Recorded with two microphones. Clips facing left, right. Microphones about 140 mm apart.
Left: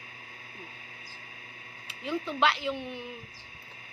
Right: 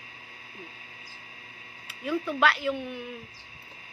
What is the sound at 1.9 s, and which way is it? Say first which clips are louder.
A woman's voice: right 3 dB; 25° left (ahead or behind).